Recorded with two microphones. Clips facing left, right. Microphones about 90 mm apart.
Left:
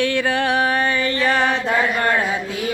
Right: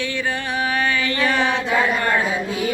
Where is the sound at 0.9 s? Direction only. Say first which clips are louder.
Left 1 dB; 40° left (ahead or behind).